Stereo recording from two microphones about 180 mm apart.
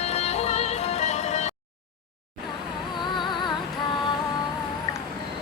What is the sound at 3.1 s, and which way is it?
Music, 25° left (ahead or behind).